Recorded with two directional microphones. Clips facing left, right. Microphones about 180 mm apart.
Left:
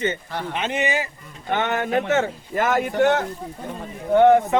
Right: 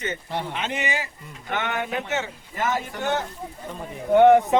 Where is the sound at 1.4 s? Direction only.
35° left (ahead or behind); by 3.2 s 65° left (ahead or behind).